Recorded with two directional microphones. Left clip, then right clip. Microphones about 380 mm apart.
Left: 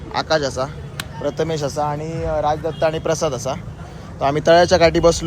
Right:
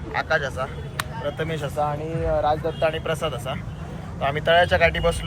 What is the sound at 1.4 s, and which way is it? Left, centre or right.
Speech, centre.